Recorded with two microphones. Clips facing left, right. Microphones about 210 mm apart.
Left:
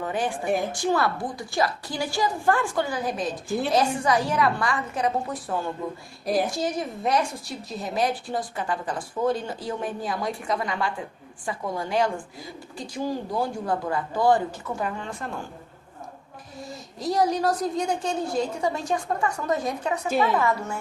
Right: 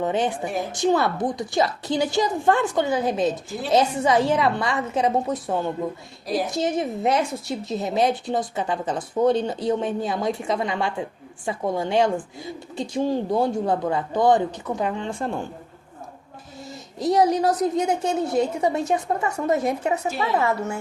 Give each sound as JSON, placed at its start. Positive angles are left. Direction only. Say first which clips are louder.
{"t": 0.0, "sound": "a woman's voice", "louder": "right 4 dB", "side_deg": -20}
{"t": 17.3, "sound": "a woman's voice", "louder": "right 4 dB", "side_deg": -20}